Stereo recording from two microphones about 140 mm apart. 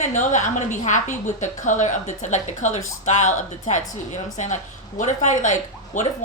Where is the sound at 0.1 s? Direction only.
60° left (ahead or behind).